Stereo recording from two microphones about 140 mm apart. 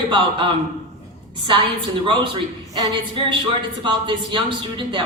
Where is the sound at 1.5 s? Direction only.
35° right (ahead or behind).